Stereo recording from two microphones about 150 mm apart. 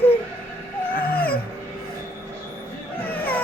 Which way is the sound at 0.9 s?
75° left (ahead or behind).